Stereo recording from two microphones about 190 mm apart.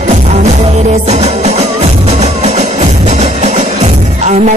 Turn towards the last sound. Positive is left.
turn(degrees=-35)  # may be behind; listen again after turning